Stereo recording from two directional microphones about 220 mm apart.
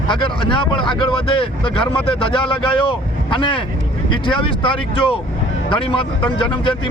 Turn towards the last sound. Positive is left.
turn(degrees=20)  # may be behind; listen again after turning